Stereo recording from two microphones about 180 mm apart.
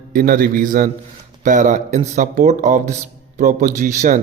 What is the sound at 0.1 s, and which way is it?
A man's voice, 50° right (ahead or behind).